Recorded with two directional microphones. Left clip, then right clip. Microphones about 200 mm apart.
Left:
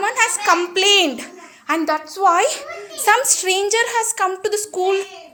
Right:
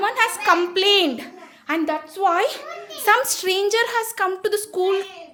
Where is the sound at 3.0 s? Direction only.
20° right (ahead or behind).